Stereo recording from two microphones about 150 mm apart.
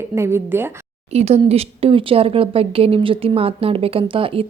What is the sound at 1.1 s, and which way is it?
Speech, 45° right (ahead or behind).